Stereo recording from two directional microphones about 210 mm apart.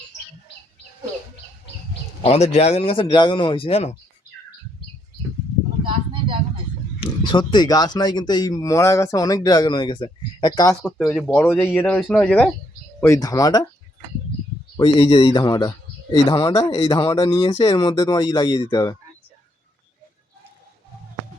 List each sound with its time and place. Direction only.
1.9 s speech: 30° left (ahead or behind)
5.8 s a sound: 25° right (ahead or behind)
7.0 s speech: 20° left (ahead or behind)
14.8 s speech: 25° left (ahead or behind)